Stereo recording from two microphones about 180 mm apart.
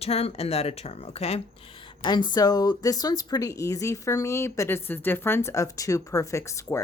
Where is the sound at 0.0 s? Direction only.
35° left (ahead or behind).